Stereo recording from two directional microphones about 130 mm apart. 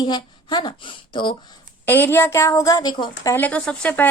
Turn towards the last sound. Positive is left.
turn(degrees=10)  # may be behind; listen again after turning